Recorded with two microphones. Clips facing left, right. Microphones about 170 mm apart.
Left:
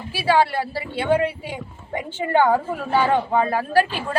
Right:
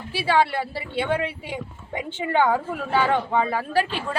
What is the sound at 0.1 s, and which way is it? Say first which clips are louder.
Speech: left 2 dB; 10° left (ahead or behind).